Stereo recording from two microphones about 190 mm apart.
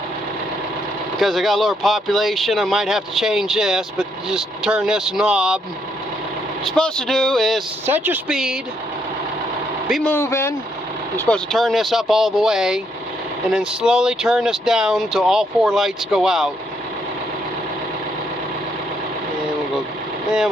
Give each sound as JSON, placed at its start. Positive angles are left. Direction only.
{"t": 1.2, "sound": "speech", "side_deg": 0}
{"t": 6.7, "sound": "speech", "side_deg": 5}
{"t": 7.9, "sound": "speech", "side_deg": -10}
{"t": 9.9, "sound": "speech", "side_deg": 10}
{"t": 11.3, "sound": "speech", "side_deg": 0}